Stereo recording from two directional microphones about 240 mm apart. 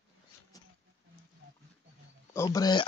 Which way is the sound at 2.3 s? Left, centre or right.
Centre.